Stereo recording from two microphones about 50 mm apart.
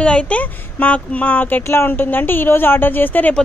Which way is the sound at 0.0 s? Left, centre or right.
Left.